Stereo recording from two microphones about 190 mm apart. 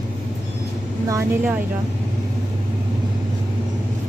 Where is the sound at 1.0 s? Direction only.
15° right (ahead or behind).